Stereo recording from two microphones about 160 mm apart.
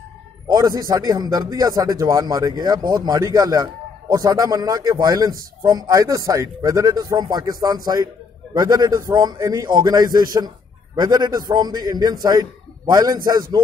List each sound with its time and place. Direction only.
0.5 s a man's voice: 25° right (ahead or behind)